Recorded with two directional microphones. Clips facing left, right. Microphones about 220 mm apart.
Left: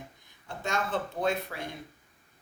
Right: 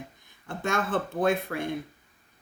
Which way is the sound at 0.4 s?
55° right (ahead or behind).